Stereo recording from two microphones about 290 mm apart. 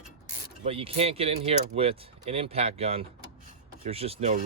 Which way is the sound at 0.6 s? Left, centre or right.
Centre.